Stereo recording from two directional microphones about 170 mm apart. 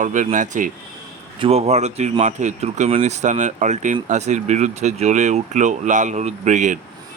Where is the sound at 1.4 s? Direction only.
35° right (ahead or behind).